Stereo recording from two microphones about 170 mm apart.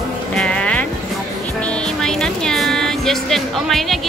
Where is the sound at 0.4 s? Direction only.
5° left (ahead or behind).